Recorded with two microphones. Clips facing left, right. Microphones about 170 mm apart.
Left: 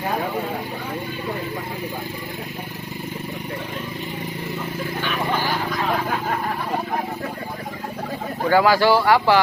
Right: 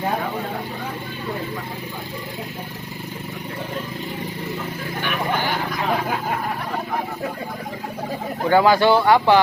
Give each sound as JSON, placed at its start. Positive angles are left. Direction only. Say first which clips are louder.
{"t": 8.4, "sound": "speech", "louder": "right 1 dB", "side_deg": -20}